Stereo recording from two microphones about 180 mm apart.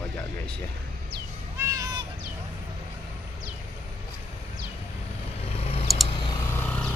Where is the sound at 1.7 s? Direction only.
20° right (ahead or behind).